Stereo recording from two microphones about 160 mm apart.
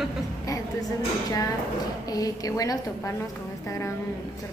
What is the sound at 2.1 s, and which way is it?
A woman's voice, 25° left (ahead or behind).